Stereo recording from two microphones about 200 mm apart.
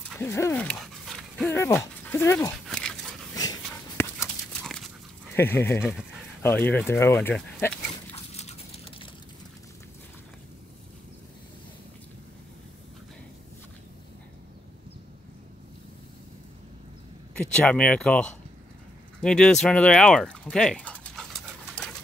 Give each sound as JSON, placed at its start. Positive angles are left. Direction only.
{"t": 0.2, "sound": "dog", "side_deg": 10}
{"t": 1.5, "sound": "speech", "side_deg": 10}
{"t": 2.5, "sound": "dog", "side_deg": 5}
{"t": 3.3, "sound": "a sound", "side_deg": 15}
{"t": 4.6, "sound": "dog", "side_deg": 0}
{"t": 5.3, "sound": "speech", "side_deg": 10}
{"t": 5.8, "sound": "speech", "side_deg": -5}
{"t": 6.4, "sound": "speech", "side_deg": 10}
{"t": 8.1, "sound": "a sound", "side_deg": 30}
{"t": 17.5, "sound": "speech", "side_deg": 5}
{"t": 19.2, "sound": "a sound", "side_deg": 5}